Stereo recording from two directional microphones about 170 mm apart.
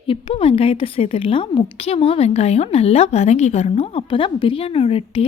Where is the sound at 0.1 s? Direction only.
35° left (ahead or behind).